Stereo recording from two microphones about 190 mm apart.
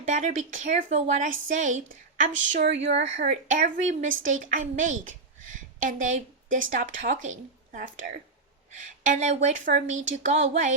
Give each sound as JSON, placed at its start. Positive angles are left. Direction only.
{"t": 0.1, "sound": "a woman's voice", "side_deg": -40}
{"t": 9.9, "sound": "speech", "side_deg": -90}
{"t": 10.2, "sound": "speech", "side_deg": -40}